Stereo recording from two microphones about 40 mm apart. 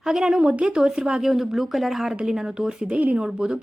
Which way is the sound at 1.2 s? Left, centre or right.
Centre.